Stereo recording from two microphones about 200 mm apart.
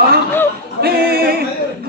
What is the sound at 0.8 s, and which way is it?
Speech, 50° right (ahead or behind).